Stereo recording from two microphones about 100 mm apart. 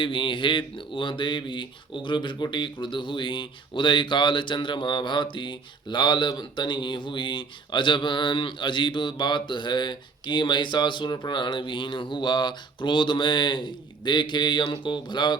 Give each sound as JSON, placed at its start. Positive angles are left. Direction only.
{"t": 0.0, "sound": "speech", "side_deg": 55}